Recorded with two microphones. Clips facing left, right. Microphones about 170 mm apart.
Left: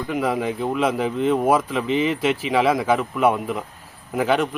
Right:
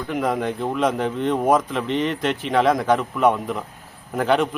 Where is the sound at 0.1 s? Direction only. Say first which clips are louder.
Even; 5° left (ahead or behind).